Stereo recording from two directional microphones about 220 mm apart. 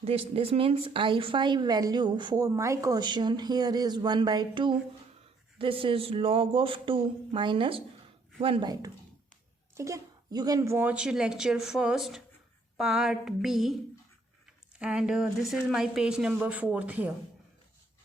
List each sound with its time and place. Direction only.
0.0 s a woman's voice: 25° right (ahead or behind); by 13.7 s centre (ahead or behind)
14.8 s speech: 5° right (ahead or behind)